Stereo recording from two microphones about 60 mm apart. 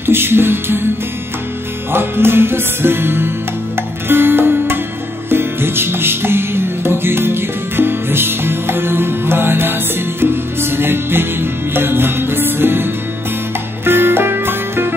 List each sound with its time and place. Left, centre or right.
0.0 s music: right
1.9 s music: right